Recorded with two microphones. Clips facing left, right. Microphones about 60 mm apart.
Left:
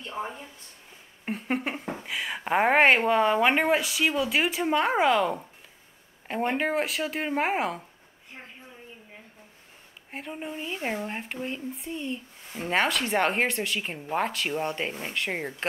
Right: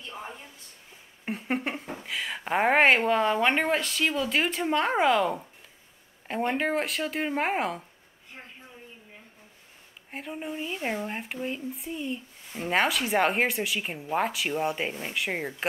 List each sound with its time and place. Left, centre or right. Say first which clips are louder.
0.0 s a sound: left 5 dB; left
1.2 s speech: left 1 dB; centre
10.1 s speech: right 1 dB; centre